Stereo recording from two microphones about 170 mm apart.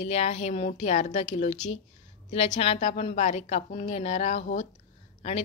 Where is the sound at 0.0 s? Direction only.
40° left (ahead or behind).